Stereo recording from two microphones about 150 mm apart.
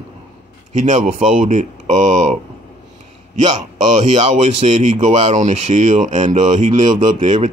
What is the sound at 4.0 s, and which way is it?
Speech, 50° right (ahead or behind).